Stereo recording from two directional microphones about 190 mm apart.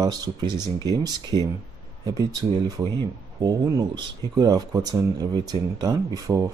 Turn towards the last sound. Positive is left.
turn(degrees=-15)  # may be behind; listen again after turning